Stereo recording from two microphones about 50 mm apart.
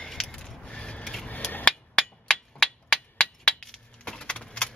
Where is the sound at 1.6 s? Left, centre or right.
Centre.